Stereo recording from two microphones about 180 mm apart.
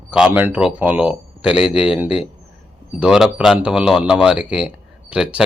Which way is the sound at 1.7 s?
30° left (ahead or behind).